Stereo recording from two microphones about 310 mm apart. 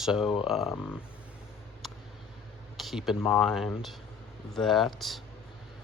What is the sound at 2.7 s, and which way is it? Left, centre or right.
Speech, centre.